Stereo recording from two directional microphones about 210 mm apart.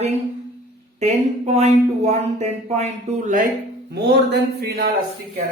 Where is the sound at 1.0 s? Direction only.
30° right (ahead or behind).